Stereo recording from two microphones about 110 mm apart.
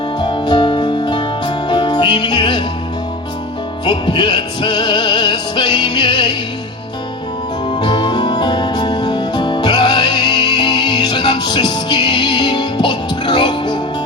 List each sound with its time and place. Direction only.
0.2 s music: 45° left (ahead or behind)
3.8 s music: 40° left (ahead or behind)
7.7 s music: 45° left (ahead or behind)